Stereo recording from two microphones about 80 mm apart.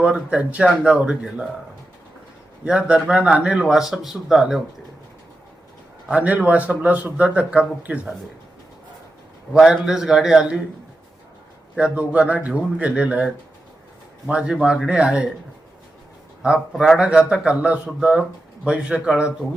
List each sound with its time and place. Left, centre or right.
0.0 s a man's voice: centre
2.6 s a man's voice: centre
6.1 s a man's voice: centre
9.5 s a man's voice: centre
11.8 s a man's voice: centre
16.4 s a man's voice: centre